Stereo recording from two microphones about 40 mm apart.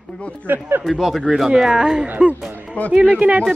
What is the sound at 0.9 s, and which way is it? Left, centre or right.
Speech, centre.